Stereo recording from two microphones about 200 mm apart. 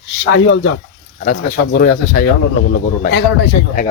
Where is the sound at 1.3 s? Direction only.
50° left (ahead or behind).